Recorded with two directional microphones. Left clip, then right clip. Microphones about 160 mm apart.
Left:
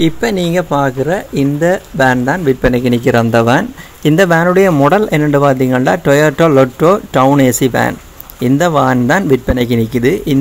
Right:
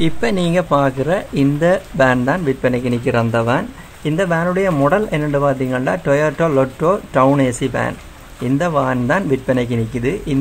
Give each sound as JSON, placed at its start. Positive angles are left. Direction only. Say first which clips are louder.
{"t": 0.0, "sound": "speech", "louder": "left 4 dB", "side_deg": 20}
{"t": 2.6, "sound": "speech", "louder": "left 6 dB", "side_deg": 35}